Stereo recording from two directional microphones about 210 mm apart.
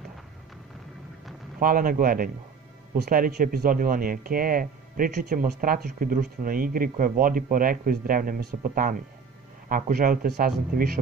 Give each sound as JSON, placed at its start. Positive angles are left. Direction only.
{"t": 1.6, "sound": "speech", "side_deg": -45}